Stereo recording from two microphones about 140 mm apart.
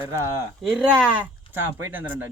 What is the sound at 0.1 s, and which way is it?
Speech, 20° right (ahead or behind).